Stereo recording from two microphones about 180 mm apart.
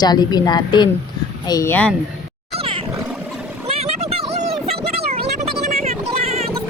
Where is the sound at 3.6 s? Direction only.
35° right (ahead or behind).